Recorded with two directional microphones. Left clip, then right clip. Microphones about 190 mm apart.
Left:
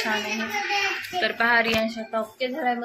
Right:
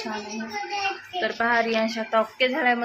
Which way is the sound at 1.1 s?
10° right (ahead or behind).